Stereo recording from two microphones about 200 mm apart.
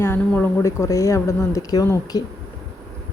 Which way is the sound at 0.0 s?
10° left (ahead or behind).